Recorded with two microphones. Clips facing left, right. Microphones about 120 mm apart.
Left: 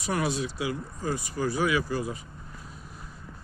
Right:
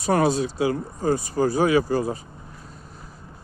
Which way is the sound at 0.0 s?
35° right (ahead or behind).